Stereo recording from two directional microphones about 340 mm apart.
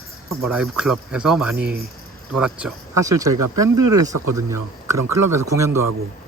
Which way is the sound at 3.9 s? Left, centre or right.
Centre.